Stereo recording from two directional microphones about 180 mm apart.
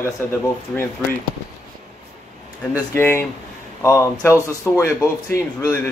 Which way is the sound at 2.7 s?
15° left (ahead or behind).